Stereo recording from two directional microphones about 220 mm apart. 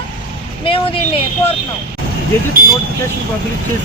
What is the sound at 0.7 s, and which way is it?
Speech, 25° left (ahead or behind).